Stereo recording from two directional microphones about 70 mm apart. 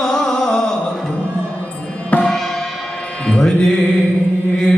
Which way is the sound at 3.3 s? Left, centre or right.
Centre.